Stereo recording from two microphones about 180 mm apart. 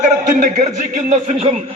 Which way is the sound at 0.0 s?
45° right (ahead or behind).